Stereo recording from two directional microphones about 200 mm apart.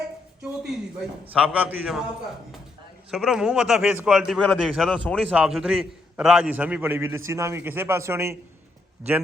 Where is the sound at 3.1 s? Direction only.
Centre (ahead or behind).